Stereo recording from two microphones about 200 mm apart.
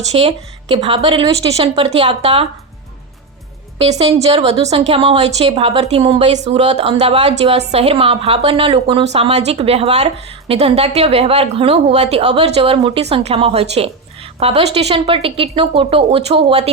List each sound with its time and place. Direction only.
0.1 s a woman's voice: 30° right (ahead or behind)
3.8 s a woman's voice: 30° right (ahead or behind)